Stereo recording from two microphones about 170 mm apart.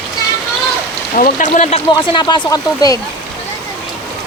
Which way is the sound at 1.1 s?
45° left (ahead or behind).